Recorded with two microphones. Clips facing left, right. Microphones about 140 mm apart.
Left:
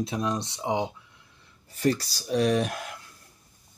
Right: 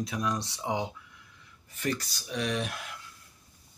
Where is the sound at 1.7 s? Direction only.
35° left (ahead or behind).